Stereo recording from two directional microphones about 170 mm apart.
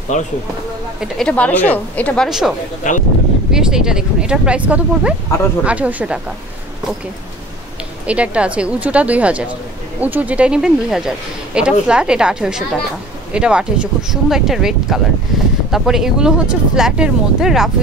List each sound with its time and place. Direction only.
0.1 s speech: 45° left (ahead or behind)
1.0 s a woman's voice: 5° left (ahead or behind)
2.2 s a woman's voice: centre (ahead or behind)
2.8 s speech: 50° left (ahead or behind)
3.5 s a woman's voice: 5° right (ahead or behind)
8.1 s a woman's voice: 5° right (ahead or behind)